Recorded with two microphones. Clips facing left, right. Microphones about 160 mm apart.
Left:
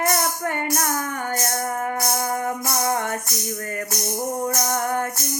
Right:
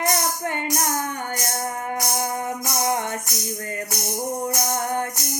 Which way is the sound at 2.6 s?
20° right (ahead or behind).